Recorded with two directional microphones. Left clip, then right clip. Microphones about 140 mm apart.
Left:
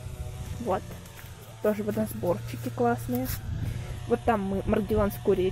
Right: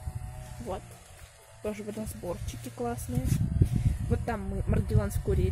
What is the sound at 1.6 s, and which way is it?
Speech, 5° left (ahead or behind).